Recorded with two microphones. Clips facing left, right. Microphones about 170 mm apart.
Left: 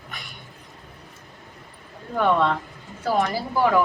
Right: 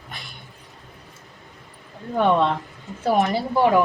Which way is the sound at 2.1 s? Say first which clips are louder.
Right 2 dB; 20° right (ahead or behind).